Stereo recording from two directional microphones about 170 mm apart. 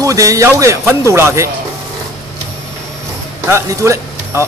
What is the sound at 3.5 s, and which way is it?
Speech, 15° right (ahead or behind).